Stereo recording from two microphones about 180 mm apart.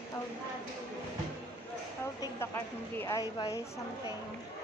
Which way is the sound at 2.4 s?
15° left (ahead or behind).